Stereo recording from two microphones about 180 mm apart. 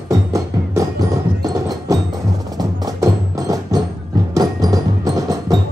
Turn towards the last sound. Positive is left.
turn(degrees=-20)  # may be behind; listen again after turning